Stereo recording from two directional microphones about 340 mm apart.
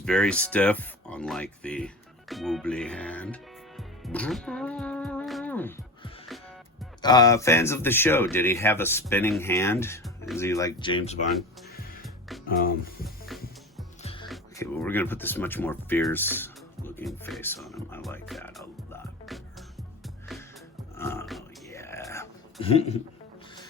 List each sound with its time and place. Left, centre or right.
0.0 s speech: centre
2.3 s music: centre
7.0 s speech: centre
12.5 s speech: left
13.2 s music: centre
14.0 s music: centre
14.3 s speech: centre
20.9 s whispering: centre